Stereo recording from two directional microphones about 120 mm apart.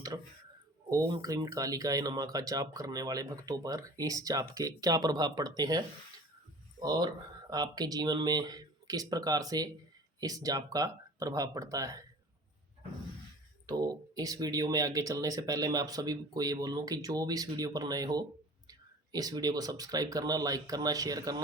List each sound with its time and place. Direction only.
0.9 s speech: 30° right (ahead or behind)
13.7 s speech: 35° right (ahead or behind)